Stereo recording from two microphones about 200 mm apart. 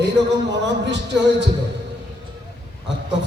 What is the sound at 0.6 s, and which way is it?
Speech, 60° right (ahead or behind).